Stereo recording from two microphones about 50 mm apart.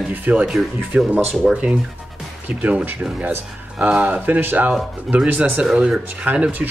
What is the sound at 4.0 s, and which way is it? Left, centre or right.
Speech, right.